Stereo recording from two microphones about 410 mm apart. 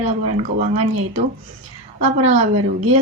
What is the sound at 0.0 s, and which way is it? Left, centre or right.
Speech, centre.